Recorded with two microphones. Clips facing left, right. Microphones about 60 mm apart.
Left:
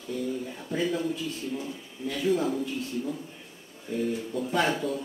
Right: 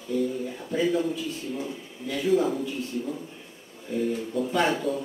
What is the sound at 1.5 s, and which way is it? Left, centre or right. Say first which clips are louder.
Speech: right 2 dB; centre.